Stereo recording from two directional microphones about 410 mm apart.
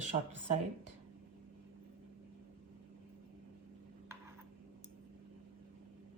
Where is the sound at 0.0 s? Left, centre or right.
Centre.